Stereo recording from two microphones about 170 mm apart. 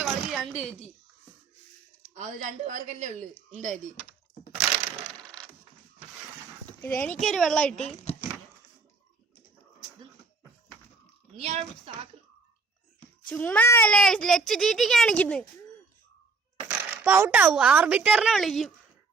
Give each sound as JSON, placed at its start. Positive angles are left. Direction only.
{"t": 0.0, "sound": "a sound", "side_deg": 0}
{"t": 2.1, "sound": "speech", "side_deg": -45}
{"t": 6.7, "sound": "dog", "side_deg": 10}
{"t": 7.2, "sound": "a child's voice", "side_deg": 0}
{"t": 11.3, "sound": "a woman's voice", "side_deg": -40}
{"t": 13.2, "sound": "a child's voice", "side_deg": 5}
{"t": 16.6, "sound": "a sound", "side_deg": -10}
{"t": 17.5, "sound": "a woman's voice", "side_deg": -10}